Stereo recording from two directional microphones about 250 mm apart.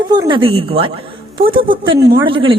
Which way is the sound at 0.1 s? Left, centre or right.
Centre.